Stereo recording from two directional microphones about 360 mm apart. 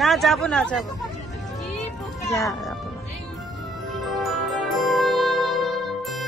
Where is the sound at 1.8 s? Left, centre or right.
Centre.